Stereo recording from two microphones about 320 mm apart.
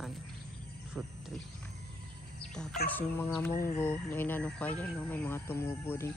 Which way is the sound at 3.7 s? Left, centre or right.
Centre.